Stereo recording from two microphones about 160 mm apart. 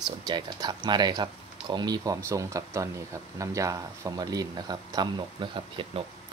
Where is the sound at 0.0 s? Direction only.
25° right (ahead or behind).